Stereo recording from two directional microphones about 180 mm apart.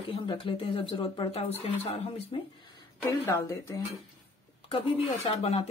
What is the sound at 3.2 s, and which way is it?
Speech, 15° left (ahead or behind).